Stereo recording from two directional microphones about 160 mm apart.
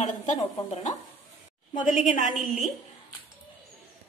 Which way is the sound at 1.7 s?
50° left (ahead or behind).